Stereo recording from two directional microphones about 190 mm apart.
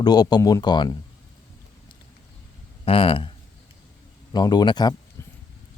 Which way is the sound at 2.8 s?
30° left (ahead or behind).